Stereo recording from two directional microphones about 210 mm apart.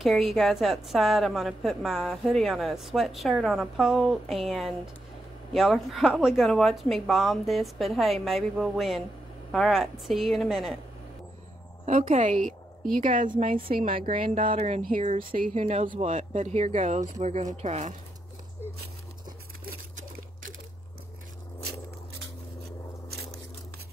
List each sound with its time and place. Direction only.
0.0 s a woman's voice: centre (ahead or behind)
11.8 s speech: 35° right (ahead or behind)
13.7 s speech: 25° right (ahead or behind)
14.8 s speech: 40° right (ahead or behind)